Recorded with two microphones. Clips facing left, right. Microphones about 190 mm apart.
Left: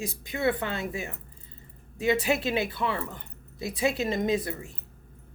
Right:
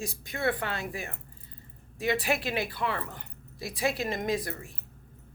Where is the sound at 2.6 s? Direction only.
25° left (ahead or behind).